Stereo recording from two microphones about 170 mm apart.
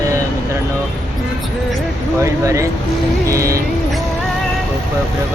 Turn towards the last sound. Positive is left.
turn(degrees=-20)  # may be behind; listen again after turning